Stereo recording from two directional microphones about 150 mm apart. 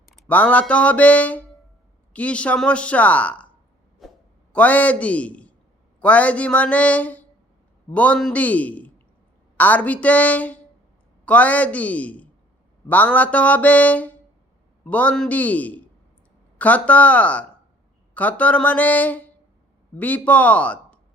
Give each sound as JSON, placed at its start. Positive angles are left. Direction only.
{"t": 0.3, "sound": "a woman's voice", "side_deg": 10}
{"t": 4.0, "sound": "a sound", "side_deg": 0}
{"t": 4.5, "sound": "a man's voice", "side_deg": 10}